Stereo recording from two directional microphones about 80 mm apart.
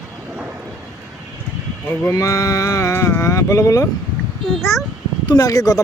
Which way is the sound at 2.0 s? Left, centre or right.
Left.